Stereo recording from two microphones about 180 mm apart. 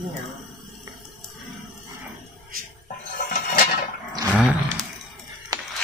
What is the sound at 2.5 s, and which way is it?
Music, 55° right (ahead or behind).